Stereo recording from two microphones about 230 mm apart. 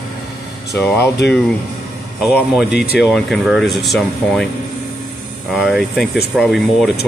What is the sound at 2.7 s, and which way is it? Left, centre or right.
Speech, left.